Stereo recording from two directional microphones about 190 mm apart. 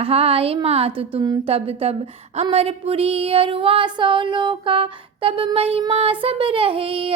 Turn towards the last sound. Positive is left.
turn(degrees=-30)  # may be behind; listen again after turning